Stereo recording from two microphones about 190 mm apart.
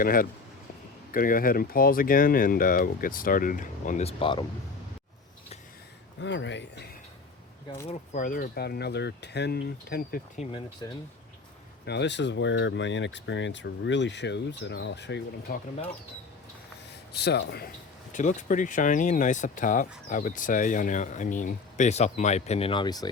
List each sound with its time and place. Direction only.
0.0 s speech: 50° left (ahead or behind); by 4.4 s 25° left (ahead or behind)
6.2 s speech: 70° left (ahead or behind)
7.9 s speech: 45° left (ahead or behind)
10.4 s speech: 35° left (ahead or behind)
10.8 s speech: 20° left (ahead or behind)
11.9 s speech: 65° left (ahead or behind)
17.2 s speech: 60° left (ahead or behind)
18.1 s speech: 40° left (ahead or behind); by 23.0 s 20° left (ahead or behind)